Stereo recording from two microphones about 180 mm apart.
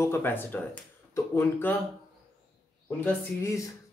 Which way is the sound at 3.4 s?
15° left (ahead or behind).